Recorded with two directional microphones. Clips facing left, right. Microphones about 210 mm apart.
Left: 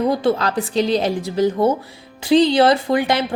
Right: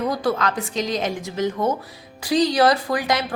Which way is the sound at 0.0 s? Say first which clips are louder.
Left 4 dB; 25° left (ahead or behind).